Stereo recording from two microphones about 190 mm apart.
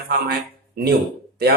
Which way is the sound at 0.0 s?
55° right (ahead or behind).